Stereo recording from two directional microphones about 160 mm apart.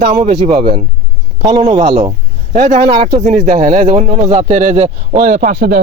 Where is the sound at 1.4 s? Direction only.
25° right (ahead or behind).